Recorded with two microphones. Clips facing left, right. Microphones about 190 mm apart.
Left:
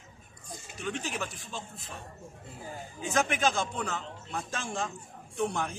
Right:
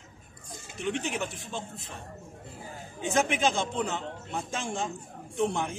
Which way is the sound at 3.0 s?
25° right (ahead or behind).